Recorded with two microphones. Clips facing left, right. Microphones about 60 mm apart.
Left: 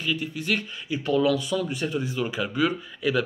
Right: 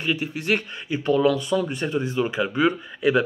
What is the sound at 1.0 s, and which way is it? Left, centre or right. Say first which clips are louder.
Speech: right 3 dB; right.